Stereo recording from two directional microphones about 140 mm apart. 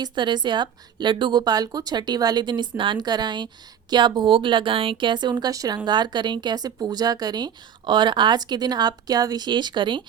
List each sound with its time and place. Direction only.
0.0 s a woman's voice: 35° right (ahead or behind)